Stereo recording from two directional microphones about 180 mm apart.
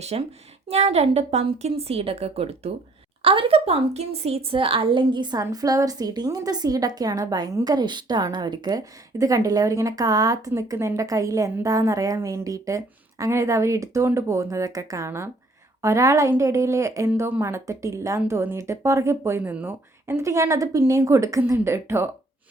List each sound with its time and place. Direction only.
0.0 s a woman's voice: 35° right (ahead or behind); by 22.1 s 15° right (ahead or behind)